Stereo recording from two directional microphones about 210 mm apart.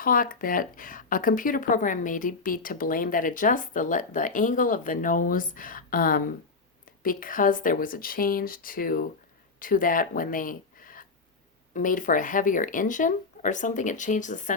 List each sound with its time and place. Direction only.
0.0 s speech: 40° left (ahead or behind)